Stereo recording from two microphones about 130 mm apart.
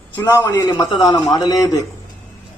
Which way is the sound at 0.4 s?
30° left (ahead or behind).